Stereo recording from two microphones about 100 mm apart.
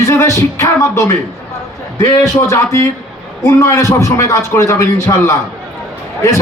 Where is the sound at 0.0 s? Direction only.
30° left (ahead or behind).